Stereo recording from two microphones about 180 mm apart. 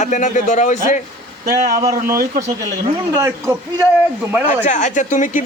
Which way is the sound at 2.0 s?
55° right (ahead or behind).